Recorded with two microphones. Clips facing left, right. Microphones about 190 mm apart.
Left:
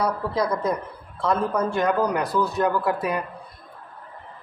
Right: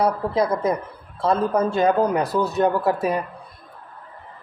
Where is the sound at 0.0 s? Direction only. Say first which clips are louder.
Right 4 dB; 25° right (ahead or behind).